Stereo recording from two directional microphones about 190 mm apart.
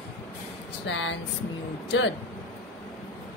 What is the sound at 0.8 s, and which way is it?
Speech, 70° left (ahead or behind).